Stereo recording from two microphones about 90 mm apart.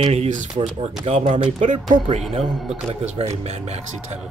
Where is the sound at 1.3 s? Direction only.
65° right (ahead or behind).